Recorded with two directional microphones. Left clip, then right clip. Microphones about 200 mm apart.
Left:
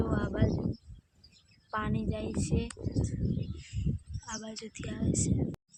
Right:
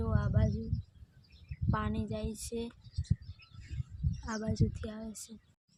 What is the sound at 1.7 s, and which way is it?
Speech, 15° left (ahead or behind).